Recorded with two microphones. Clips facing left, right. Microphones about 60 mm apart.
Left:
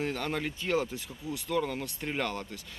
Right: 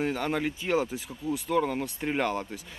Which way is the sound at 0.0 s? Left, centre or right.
Centre.